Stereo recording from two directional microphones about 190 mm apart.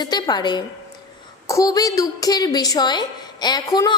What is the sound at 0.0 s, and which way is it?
A woman's voice, 20° left (ahead or behind).